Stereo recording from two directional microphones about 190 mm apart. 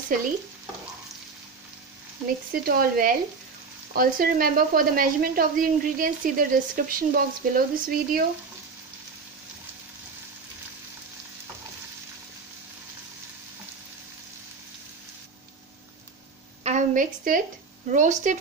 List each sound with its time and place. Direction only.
2.6 s speech: 50° right (ahead or behind)
16.6 s a sound: 40° right (ahead or behind)
17.9 s speech: 40° right (ahead or behind)